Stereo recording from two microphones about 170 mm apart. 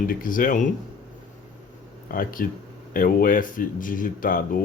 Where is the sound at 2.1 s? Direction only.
55° left (ahead or behind).